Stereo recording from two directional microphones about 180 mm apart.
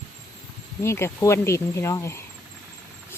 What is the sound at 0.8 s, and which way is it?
Speech, 15° left (ahead or behind).